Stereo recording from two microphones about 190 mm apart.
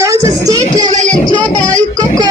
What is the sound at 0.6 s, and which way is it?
Music, 40° right (ahead or behind).